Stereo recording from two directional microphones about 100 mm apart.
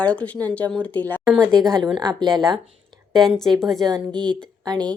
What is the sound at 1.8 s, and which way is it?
Speech, 45° right (ahead or behind).